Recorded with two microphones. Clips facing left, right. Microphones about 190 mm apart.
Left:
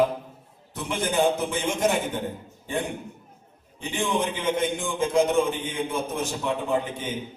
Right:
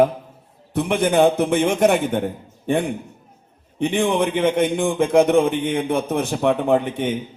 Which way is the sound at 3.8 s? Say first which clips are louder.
Right 8 dB; 65° right (ahead or behind).